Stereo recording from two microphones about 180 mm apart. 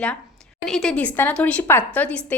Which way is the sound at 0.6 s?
5° left (ahead or behind).